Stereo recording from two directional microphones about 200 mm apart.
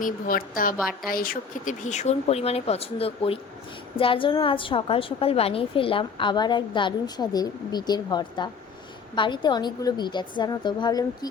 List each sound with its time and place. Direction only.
0.0 s a woman's voice: 45° left (ahead or behind)
0.8 s a woman's voice: centre (ahead or behind)
1.1 s a woman's voice: 45° left (ahead or behind); by 11.3 s 20° left (ahead or behind)